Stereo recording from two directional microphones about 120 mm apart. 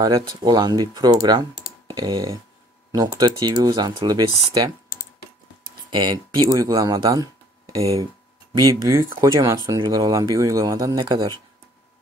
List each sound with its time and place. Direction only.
0.0 s speech: 35° right (ahead or behind)
5.9 s speech: 40° right (ahead or behind)